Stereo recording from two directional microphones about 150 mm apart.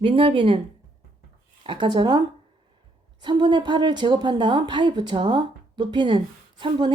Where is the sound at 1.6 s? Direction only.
30° right (ahead or behind).